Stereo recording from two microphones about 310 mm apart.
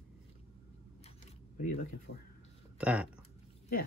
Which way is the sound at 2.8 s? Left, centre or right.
Centre.